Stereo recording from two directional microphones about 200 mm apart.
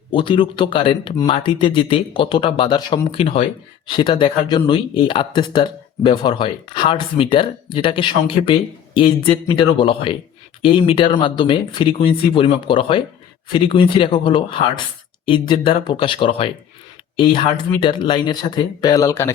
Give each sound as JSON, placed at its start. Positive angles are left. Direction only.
{"t": 0.1, "sound": "speech", "side_deg": 25}